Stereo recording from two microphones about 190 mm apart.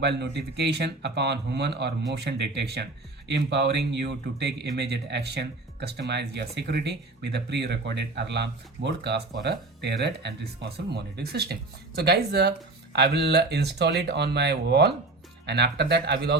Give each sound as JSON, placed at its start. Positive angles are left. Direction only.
{"t": 0.0, "sound": "speech", "side_deg": -60}